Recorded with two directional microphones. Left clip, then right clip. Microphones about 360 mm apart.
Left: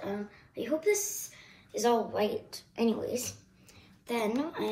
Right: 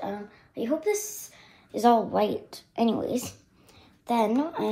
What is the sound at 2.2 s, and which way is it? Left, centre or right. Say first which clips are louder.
Speech: right 4 dB; right.